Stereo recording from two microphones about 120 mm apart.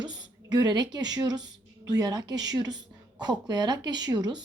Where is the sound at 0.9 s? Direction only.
35° right (ahead or behind).